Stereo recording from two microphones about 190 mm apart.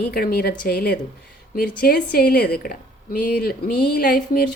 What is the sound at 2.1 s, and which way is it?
A woman's voice, 55° left (ahead or behind).